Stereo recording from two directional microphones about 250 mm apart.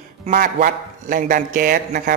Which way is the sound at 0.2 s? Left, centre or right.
Right.